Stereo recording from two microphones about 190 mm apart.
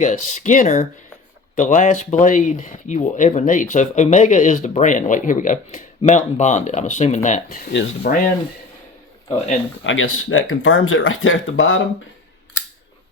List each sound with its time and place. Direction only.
0.0 s speech: 40° left (ahead or behind)
9.8 s speech: 90° left